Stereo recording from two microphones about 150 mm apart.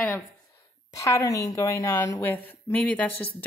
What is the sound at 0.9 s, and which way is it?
A woman's voice, 20° left (ahead or behind).